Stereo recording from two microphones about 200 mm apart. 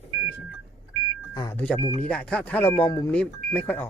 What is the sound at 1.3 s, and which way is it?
Speech, 20° left (ahead or behind).